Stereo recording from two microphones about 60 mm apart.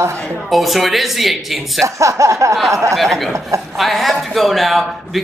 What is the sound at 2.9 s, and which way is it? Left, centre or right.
A man's voice, centre.